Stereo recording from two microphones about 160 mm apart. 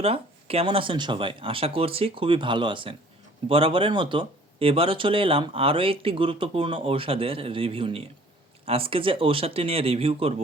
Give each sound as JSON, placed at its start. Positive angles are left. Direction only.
{"t": 0.0, "sound": "speech", "side_deg": -40}